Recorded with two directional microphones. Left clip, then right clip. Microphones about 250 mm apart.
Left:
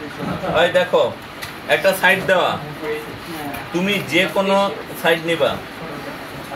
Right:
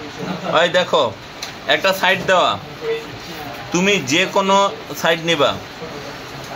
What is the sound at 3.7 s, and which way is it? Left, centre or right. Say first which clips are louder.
Speech: right 5 dB; right.